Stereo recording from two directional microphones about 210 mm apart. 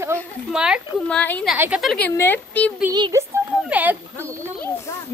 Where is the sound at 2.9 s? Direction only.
20° right (ahead or behind).